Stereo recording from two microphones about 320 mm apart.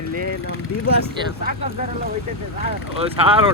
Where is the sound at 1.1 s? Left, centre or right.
Right.